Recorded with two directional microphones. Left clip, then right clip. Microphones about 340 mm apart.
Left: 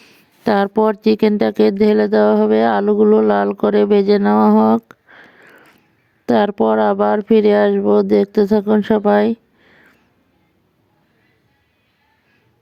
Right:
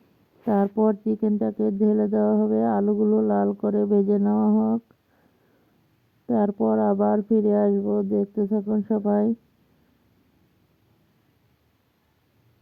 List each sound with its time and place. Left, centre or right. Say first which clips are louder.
0.4 s speech: left 8 dB; left
1.4 s speech: left 11 dB; left
6.2 s speech: left 9 dB; left